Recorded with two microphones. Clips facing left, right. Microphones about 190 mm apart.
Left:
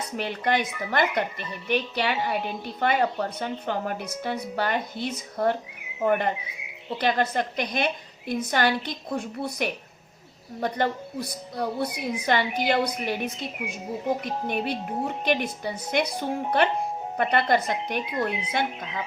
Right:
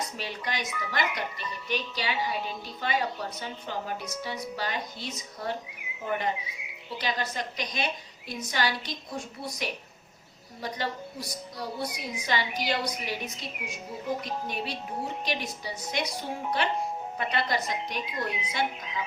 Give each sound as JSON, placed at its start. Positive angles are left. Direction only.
{"t": 0.2, "sound": "a woman's voice", "side_deg": 55}